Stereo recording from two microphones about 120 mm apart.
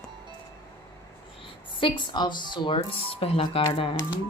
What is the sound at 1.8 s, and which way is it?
Speech, 40° left (ahead or behind).